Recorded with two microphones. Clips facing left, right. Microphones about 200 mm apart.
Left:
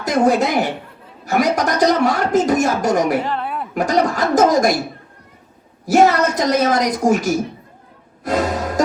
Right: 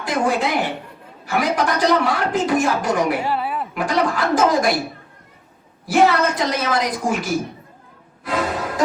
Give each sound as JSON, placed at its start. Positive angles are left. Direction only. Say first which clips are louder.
{"t": 0.0, "sound": "a woman's voice", "louder": "left 5 dB", "side_deg": 40}
{"t": 3.2, "sound": "a woman's voice", "louder": "right 1 dB", "side_deg": -5}
{"t": 3.8, "sound": "speech", "louder": "left 4 dB", "side_deg": 40}
{"t": 5.8, "sound": "speech", "louder": "left 3 dB", "side_deg": 45}
{"t": 8.2, "sound": "music", "louder": "left 4 dB", "side_deg": 45}